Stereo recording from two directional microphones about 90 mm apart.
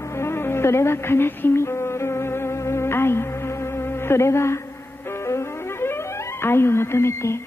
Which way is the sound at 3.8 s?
30° left (ahead or behind).